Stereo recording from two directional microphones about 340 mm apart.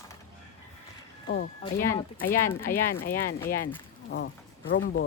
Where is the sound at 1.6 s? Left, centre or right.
Centre.